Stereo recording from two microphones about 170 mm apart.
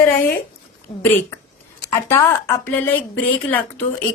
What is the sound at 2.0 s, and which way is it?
Speech, 15° left (ahead or behind).